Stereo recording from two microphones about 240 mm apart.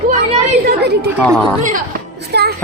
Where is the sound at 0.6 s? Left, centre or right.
Right.